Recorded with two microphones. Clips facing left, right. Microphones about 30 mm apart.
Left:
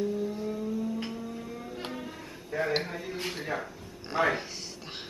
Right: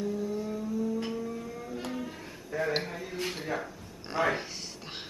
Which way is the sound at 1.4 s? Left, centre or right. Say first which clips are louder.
Even; left.